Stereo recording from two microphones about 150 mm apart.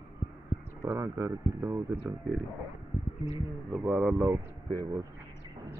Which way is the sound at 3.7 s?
10° right (ahead or behind).